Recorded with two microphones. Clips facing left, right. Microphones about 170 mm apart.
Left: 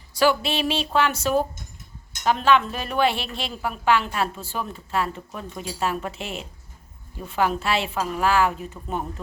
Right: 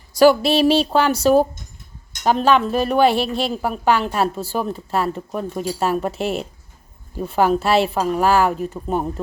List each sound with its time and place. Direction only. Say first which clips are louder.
0.1 s a woman's voice: right 8 dB; 40° right (ahead or behind)